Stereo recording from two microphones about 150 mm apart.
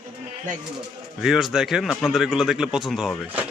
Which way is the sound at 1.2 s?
Centre (ahead or behind).